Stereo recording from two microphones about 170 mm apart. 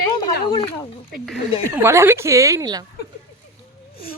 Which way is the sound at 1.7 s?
15° right (ahead or behind).